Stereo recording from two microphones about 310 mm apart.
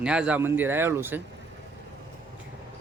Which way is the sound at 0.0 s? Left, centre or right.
Centre.